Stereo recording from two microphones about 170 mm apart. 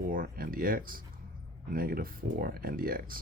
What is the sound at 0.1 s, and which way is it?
Speech, 55° right (ahead or behind).